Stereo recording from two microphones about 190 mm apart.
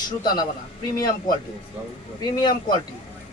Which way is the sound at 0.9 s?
20° left (ahead or behind).